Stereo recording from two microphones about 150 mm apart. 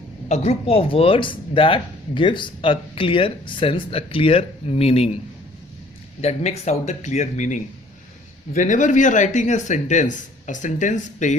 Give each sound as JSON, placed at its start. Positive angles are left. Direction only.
{"t": 0.3, "sound": "speech", "side_deg": 45}
{"t": 6.2, "sound": "speech", "side_deg": 45}